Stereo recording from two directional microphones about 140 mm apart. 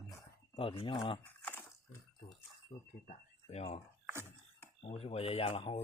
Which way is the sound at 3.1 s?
50° left (ahead or behind).